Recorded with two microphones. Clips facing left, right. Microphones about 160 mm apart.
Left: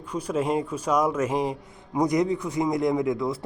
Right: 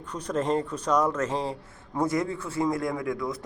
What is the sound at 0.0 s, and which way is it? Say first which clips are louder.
A man's voice: left 2 dB; 10° left (ahead or behind).